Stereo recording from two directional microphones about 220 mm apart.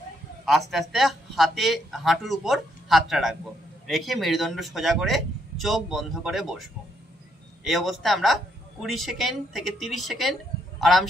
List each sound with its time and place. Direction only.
0.5 s speech: centre (ahead or behind)